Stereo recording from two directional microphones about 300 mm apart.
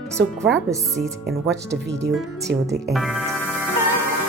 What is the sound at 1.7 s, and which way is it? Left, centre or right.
Speech, centre.